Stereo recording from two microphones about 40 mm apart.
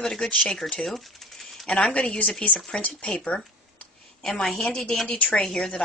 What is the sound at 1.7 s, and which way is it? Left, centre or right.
Speech, left.